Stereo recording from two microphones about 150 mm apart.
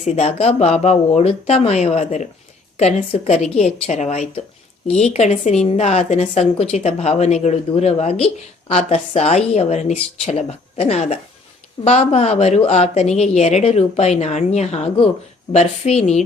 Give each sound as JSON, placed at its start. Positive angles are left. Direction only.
{"t": 0.0, "sound": "a woman's voice", "side_deg": 50}